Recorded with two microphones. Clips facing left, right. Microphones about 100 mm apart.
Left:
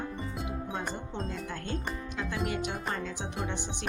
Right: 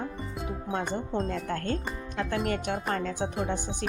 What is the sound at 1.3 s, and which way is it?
A woman's voice, 55° right (ahead or behind).